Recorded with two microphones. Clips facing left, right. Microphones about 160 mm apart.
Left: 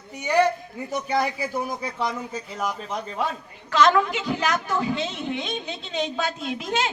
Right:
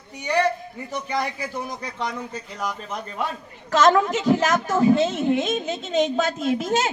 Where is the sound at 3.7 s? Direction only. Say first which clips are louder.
Right 2 dB; 45° right (ahead or behind).